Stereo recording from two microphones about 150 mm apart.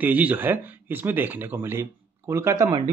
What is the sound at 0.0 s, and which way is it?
Speech, 10° right (ahead or behind).